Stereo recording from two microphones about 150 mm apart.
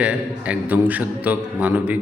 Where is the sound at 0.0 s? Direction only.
10° right (ahead or behind).